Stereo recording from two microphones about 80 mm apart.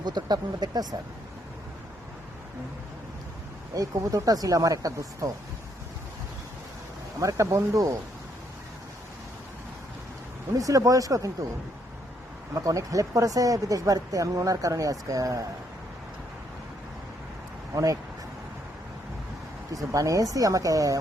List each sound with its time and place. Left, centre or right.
0.0 s speech: right
3.8 s speech: right
7.2 s speech: right
10.5 s speech: right
12.5 s speech: right
19.7 s speech: right